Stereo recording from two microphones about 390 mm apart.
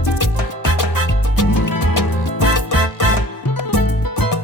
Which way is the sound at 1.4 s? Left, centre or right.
Left.